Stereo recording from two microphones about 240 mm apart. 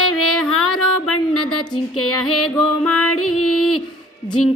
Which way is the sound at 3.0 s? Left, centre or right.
Left.